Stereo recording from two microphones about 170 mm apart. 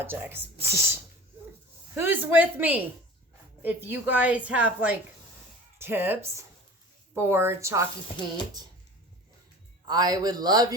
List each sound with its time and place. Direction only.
0.0 s a woman's voice: 10° right (ahead or behind)
2.0 s a woman's voice: 10° right (ahead or behind)
9.8 s speech: 25° right (ahead or behind)